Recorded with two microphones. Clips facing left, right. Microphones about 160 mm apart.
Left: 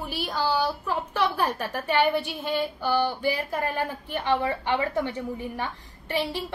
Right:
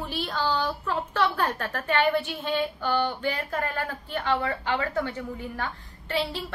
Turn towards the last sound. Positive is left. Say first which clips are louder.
# left 1 dB
turn(degrees=15)  # may be behind; listen again after turning